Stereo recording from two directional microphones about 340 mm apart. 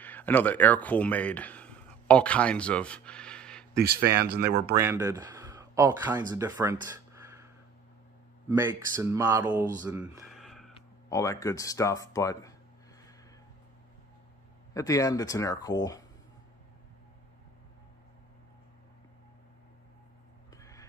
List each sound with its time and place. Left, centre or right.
0.0 s speech: centre
3.8 s speech: right
4.7 s speech: centre
9.8 s a sound: centre
10.7 s speech: centre
14.7 s speech: centre
20.5 s a sound: centre